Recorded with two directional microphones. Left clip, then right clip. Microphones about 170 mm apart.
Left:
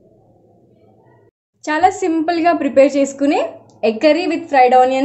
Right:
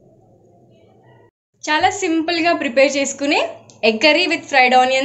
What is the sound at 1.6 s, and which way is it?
A woman's voice, 60° left (ahead or behind).